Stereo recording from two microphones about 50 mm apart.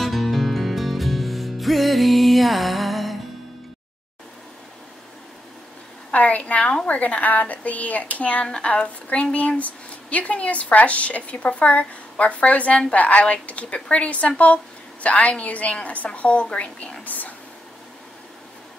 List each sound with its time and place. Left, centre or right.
0.0 s music: centre
6.1 s a woman's voice: left
17.0 s a woman's voice: left